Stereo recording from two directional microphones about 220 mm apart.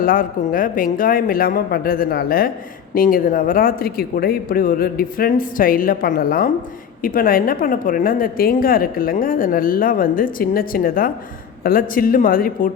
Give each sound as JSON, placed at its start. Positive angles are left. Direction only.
{"t": 0.0, "sound": "a woman's voice", "side_deg": 40}